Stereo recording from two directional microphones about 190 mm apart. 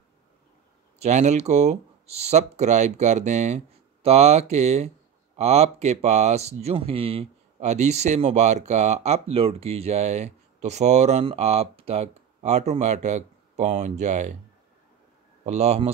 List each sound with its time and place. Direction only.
0.9 s speech: 35° right (ahead or behind)
15.4 s speech: 35° right (ahead or behind)